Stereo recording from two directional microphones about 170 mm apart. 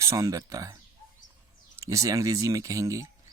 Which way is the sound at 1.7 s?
20° right (ahead or behind).